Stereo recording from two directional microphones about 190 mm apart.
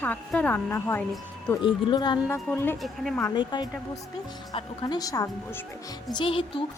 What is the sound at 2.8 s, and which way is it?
Speech, centre (ahead or behind).